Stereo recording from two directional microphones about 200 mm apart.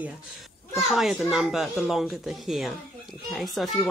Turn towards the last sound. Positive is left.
turn(degrees=0)  # may be behind; listen again after turning